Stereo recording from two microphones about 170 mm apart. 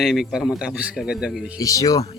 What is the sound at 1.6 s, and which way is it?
Speech, 20° left (ahead or behind).